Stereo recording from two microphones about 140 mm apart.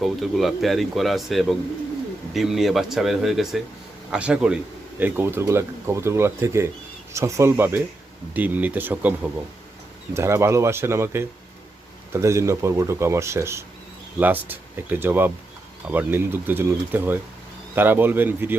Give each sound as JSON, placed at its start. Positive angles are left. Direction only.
{"t": 0.0, "sound": "speech", "side_deg": 0}
{"t": 10.2, "sound": "speech", "side_deg": -20}